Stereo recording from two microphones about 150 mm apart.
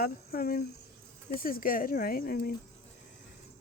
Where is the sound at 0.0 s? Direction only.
85° left.